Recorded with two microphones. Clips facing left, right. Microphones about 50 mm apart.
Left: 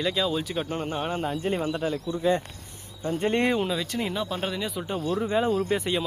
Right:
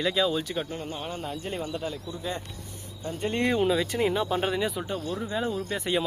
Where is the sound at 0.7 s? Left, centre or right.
Left.